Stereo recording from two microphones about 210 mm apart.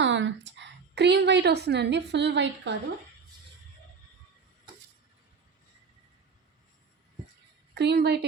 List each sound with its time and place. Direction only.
0.0 s a woman's voice: 60° right (ahead or behind)
7.7 s a woman's voice: 50° right (ahead or behind)